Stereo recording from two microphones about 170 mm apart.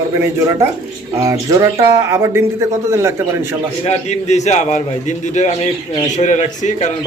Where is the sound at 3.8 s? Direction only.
40° left (ahead or behind).